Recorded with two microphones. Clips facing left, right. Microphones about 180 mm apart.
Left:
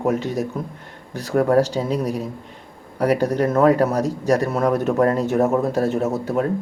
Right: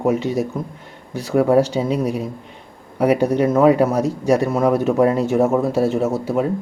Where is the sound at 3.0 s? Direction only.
10° right (ahead or behind).